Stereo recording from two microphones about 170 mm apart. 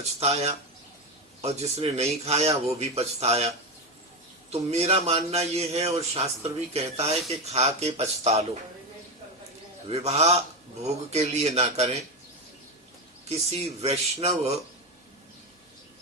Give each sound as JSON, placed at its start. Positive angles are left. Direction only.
{"t": 0.2, "sound": "a man's voice", "side_deg": -40}
{"t": 4.5, "sound": "a man's voice", "side_deg": -35}
{"t": 9.9, "sound": "a man's voice", "side_deg": -40}
{"t": 13.2, "sound": "a man's voice", "side_deg": -35}